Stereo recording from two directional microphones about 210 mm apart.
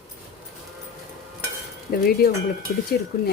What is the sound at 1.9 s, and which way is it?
Speech, 50° left (ahead or behind).